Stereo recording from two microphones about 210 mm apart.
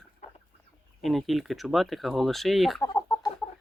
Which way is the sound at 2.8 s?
10° left (ahead or behind).